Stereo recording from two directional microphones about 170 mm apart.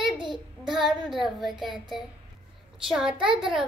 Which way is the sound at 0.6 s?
Centre (ahead or behind).